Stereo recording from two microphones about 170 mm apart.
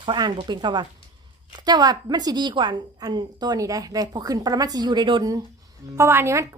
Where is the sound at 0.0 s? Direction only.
25° right (ahead or behind).